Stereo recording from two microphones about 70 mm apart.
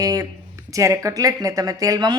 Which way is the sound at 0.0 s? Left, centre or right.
Right.